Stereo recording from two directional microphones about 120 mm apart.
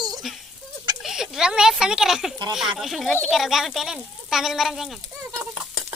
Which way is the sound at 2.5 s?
5° right (ahead or behind).